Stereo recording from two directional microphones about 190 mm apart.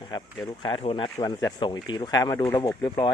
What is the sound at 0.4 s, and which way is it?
Speech, 25° left (ahead or behind).